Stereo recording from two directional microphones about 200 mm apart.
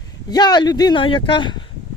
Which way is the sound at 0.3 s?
20° left (ahead or behind).